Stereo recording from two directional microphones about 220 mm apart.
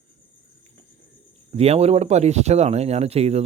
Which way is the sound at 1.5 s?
30° right (ahead or behind).